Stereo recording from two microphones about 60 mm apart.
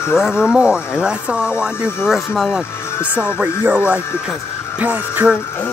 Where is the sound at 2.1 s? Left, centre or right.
Centre.